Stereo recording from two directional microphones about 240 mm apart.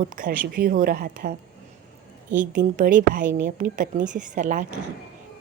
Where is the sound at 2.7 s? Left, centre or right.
Right.